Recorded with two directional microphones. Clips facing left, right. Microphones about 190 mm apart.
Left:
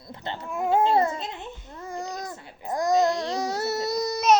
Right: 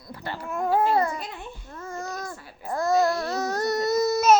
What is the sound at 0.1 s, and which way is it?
Dog, 20° left (ahead or behind).